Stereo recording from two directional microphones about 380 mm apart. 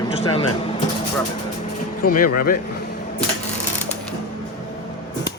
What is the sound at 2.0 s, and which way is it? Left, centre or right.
Speech, left.